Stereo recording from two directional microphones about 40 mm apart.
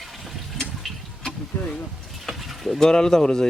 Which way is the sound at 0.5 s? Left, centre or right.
Centre.